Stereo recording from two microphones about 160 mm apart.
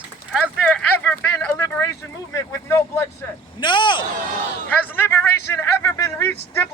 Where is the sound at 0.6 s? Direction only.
5° left (ahead or behind).